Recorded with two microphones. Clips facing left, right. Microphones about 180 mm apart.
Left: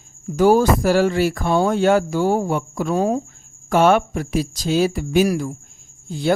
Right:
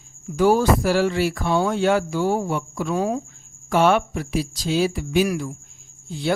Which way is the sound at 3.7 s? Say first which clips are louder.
Left 3 dB; 45° left (ahead or behind).